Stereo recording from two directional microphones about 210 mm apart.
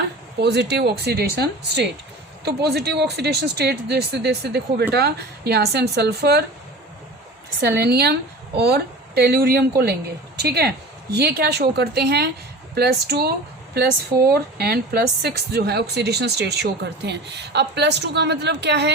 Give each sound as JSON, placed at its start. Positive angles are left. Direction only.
{"t": 0.3, "sound": "speech", "side_deg": -50}
{"t": 7.8, "sound": "a woman's voice", "side_deg": -50}
{"t": 14.3, "sound": "speech", "side_deg": -50}